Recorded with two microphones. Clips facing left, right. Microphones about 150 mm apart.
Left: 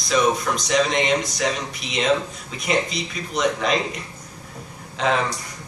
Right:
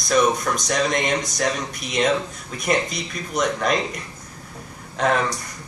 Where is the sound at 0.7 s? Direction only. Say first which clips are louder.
Left 3 dB; 50° right (ahead or behind).